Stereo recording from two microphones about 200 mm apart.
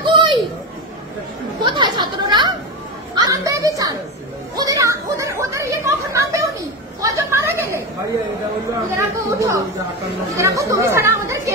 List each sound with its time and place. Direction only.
0.0 s children playing: 25° right (ahead or behind)
1.6 s chatter: 20° right (ahead or behind)
3.2 s children playing: 15° right (ahead or behind)
4.6 s chatter: 15° right (ahead or behind)
7.0 s a sound: 15° right (ahead or behind)
8.6 s chatter: 15° right (ahead or behind)